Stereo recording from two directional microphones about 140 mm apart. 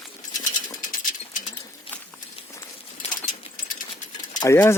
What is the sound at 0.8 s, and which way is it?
Pigeon, 75° left (ahead or behind).